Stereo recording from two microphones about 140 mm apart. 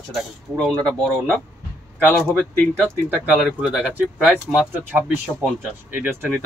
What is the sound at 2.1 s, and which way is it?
Speech, 5° left (ahead or behind).